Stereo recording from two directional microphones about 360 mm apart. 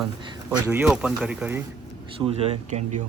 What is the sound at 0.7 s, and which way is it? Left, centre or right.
Speech, centre.